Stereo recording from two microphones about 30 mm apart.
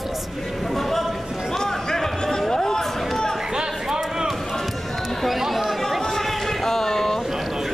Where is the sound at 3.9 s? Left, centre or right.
Centre.